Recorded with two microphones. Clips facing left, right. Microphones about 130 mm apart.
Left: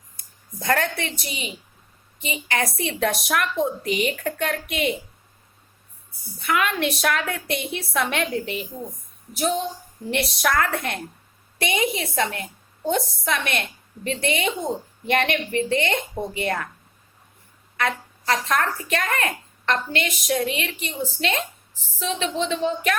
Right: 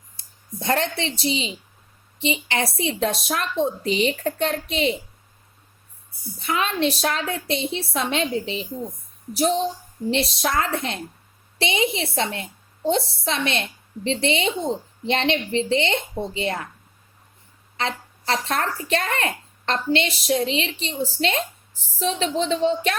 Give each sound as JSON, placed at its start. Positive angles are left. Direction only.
{"t": 0.2, "sound": "a woman's voice", "side_deg": -25}
{"t": 6.4, "sound": "a woman's voice", "side_deg": -25}
{"t": 9.3, "sound": "a woman's voice", "side_deg": -35}
{"t": 10.1, "sound": "a woman's voice", "side_deg": -25}
{"t": 17.7, "sound": "a woman's voice", "side_deg": -25}